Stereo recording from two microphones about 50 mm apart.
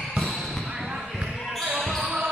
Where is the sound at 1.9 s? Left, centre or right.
Centre.